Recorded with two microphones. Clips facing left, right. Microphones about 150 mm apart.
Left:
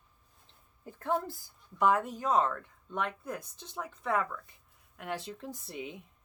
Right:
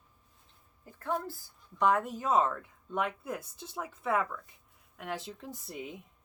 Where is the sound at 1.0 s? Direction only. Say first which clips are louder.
Left 2 dB; 20° left (ahead or behind).